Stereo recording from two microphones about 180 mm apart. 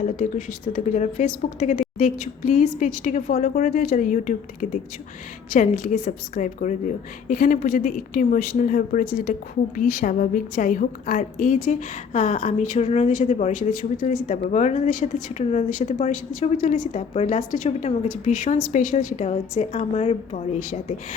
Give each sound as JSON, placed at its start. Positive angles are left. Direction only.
{"t": 0.0, "sound": "a woman's voice", "side_deg": 45}